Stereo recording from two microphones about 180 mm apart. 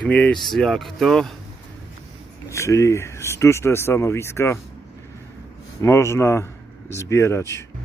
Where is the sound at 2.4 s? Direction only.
15° left (ahead or behind).